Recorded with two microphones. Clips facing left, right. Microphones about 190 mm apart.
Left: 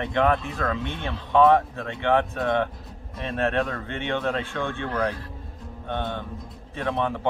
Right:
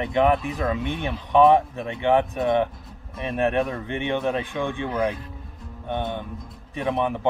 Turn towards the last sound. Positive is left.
turn(degrees=-15)  # may be behind; listen again after turning